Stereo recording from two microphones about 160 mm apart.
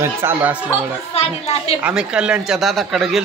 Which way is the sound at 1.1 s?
40° left (ahead or behind).